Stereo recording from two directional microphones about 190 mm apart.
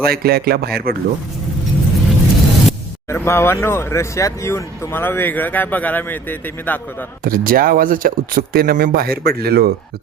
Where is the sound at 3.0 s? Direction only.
15° left (ahead or behind).